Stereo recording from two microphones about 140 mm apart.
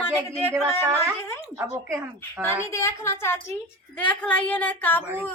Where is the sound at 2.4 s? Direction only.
20° left (ahead or behind).